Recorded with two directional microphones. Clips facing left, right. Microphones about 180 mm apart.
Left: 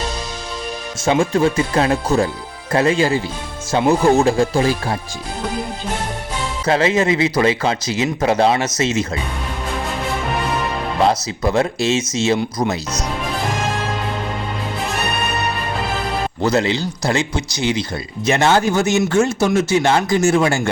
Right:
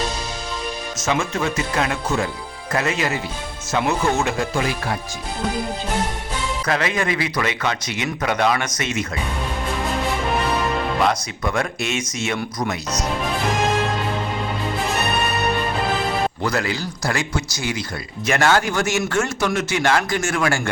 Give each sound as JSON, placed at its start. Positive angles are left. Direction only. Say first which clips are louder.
{"t": 1.0, "sound": "speech", "louder": "left 7 dB", "side_deg": 30}
{"t": 6.7, "sound": "speech", "louder": "left 7 dB", "side_deg": 25}
{"t": 11.4, "sound": "speech", "louder": "left 6 dB", "side_deg": 25}
{"t": 16.4, "sound": "speech", "louder": "left 6 dB", "side_deg": 25}